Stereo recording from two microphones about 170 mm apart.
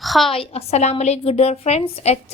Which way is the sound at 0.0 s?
Centre (ahead or behind).